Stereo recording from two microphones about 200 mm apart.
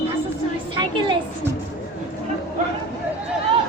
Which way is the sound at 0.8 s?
25° right (ahead or behind).